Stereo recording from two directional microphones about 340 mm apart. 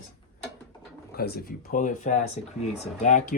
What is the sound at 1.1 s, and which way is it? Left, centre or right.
Speech, left.